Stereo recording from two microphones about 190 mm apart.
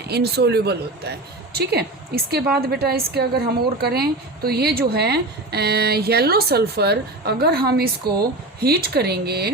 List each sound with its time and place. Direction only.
0.1 s a woman's voice: 60° right (ahead or behind)